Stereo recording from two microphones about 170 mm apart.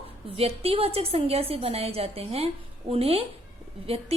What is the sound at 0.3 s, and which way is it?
A woman's voice, 35° right (ahead or behind).